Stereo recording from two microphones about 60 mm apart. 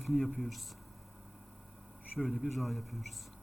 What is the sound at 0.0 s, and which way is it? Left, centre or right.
Speech, centre.